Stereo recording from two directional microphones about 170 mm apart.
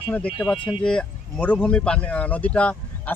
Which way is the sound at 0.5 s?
30° left (ahead or behind).